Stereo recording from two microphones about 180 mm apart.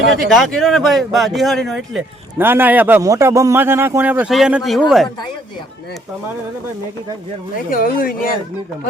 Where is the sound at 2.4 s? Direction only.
10° right (ahead or behind).